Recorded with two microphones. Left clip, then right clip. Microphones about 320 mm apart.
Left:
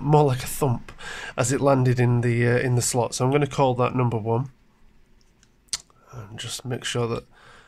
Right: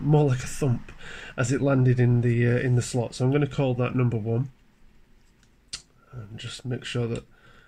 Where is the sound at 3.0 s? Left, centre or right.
Left.